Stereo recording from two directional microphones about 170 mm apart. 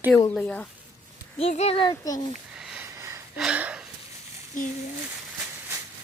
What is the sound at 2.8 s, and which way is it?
Gasp, 15° right (ahead or behind).